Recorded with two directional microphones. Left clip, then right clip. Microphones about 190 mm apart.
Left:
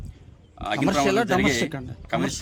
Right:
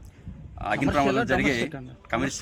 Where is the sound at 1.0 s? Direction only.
75° left (ahead or behind).